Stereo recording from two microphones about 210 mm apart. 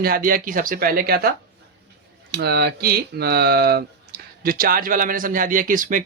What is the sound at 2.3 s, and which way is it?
Speech, 50° right (ahead or behind).